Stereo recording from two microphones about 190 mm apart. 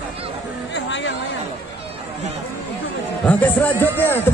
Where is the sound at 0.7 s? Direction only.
70° left (ahead or behind).